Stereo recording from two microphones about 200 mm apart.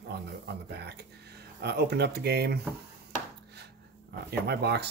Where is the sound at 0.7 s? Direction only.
55° right (ahead or behind).